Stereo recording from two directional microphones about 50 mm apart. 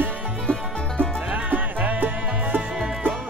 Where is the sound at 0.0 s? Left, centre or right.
Right.